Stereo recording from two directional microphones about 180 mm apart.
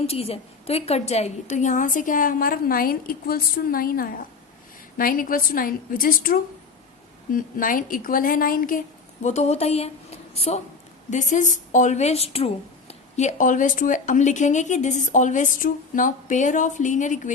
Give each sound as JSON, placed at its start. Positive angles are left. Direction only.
{"t": 0.0, "sound": "speech", "side_deg": 35}
{"t": 9.2, "sound": "a woman's voice", "side_deg": 40}